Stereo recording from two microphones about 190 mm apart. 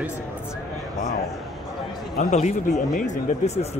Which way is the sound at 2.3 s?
40° left (ahead or behind).